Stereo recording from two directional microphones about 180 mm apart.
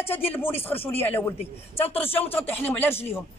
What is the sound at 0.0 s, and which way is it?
Speech, 10° left (ahead or behind).